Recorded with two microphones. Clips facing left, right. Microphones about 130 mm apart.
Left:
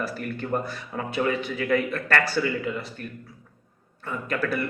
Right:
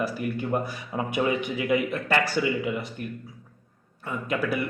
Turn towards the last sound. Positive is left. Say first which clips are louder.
# even
turn(degrees=-15)  # may be behind; listen again after turning